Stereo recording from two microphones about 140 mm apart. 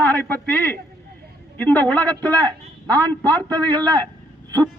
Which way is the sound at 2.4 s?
30° right (ahead or behind).